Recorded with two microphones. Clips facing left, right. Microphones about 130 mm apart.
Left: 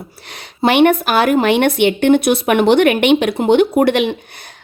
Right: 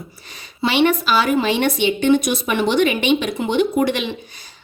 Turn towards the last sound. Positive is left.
turn(degrees=60)  # may be behind; listen again after turning